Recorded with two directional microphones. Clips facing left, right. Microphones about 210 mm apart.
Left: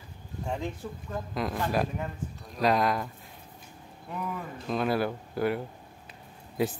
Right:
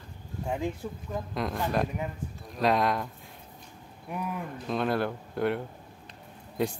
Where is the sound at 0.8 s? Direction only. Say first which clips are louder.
Right 2 dB; 10° right (ahead or behind).